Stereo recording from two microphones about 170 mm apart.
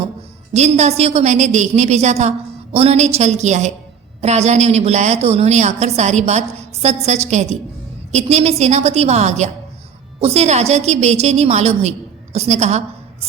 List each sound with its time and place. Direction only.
0.5 s a woman's voice: 40° right (ahead or behind)